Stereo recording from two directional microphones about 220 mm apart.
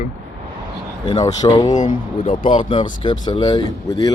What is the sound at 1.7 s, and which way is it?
Speech, 35° left (ahead or behind).